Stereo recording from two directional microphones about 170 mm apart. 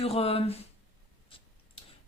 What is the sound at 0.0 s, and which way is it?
Speech, 35° left (ahead or behind).